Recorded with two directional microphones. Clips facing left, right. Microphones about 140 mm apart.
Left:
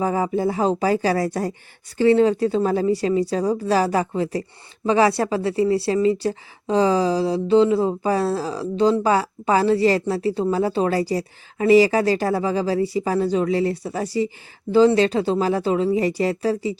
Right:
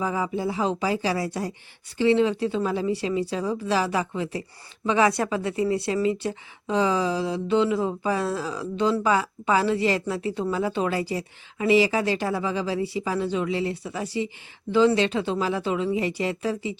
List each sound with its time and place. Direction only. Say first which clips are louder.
0.0 s a woman's voice: left 5 dB; 45° left (ahead or behind)